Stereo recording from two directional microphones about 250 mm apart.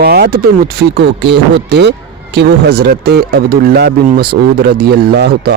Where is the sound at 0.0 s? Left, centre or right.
Right.